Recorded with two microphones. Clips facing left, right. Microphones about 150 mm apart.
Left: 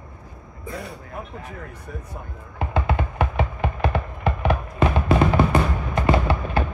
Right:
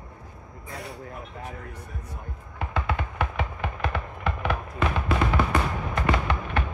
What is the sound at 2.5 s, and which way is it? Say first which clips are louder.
Music: left 5 dB; 25° left (ahead or behind).